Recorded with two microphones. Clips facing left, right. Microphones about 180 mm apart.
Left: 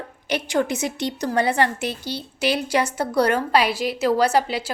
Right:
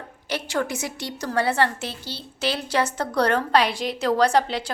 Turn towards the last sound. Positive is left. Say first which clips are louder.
# even
turn(degrees=5)  # may be behind; listen again after turning